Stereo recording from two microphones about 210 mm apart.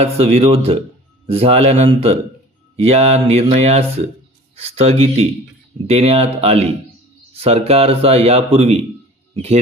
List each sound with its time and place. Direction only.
0.0 s speech: 30° right (ahead or behind)